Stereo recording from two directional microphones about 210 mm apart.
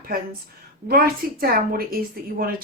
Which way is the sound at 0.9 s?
45° right (ahead or behind).